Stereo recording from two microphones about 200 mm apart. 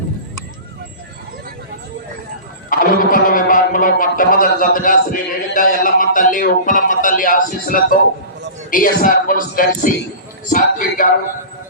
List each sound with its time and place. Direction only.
2.6 s speech: 45° left (ahead or behind)